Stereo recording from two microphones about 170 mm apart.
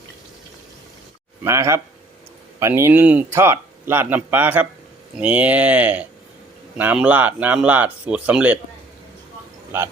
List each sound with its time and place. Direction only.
1.5 s speech: 15° right (ahead or behind)